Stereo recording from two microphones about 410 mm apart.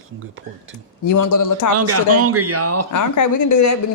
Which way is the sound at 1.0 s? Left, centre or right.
Left.